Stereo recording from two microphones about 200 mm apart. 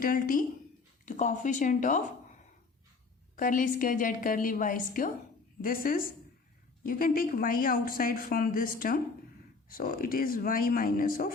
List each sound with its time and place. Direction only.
0.0 s a woman's voice: 45° left (ahead or behind)
3.3 s a woman's voice: 40° left (ahead or behind)